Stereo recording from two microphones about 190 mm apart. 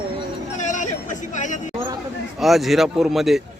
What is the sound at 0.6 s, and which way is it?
Speech, 40° left (ahead or behind).